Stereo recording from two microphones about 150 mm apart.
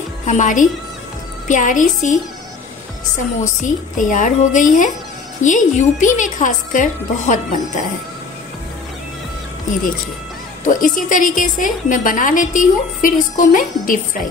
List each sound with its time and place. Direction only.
0.3 s a woman's voice: 55° left (ahead or behind)
3.6 s a woman's voice: 60° left (ahead or behind)
10.6 s a woman's voice: 65° left (ahead or behind)